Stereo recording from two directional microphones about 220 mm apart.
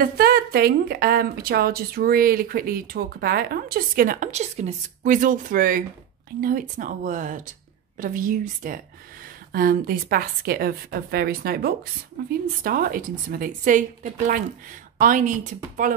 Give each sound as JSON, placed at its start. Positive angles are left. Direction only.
{"t": 0.0, "sound": "a woman's voice", "side_deg": -45}